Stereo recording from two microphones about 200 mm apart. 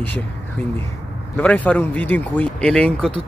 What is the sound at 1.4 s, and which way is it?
Speech, 5° left (ahead or behind).